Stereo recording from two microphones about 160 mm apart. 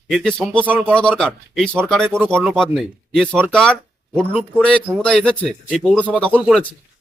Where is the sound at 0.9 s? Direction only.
5° left (ahead or behind).